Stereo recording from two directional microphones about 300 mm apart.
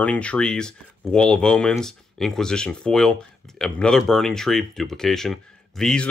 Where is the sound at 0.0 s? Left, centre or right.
Centre.